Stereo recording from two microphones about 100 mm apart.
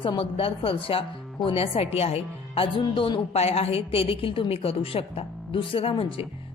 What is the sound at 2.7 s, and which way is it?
A woman's voice, 55° left (ahead or behind).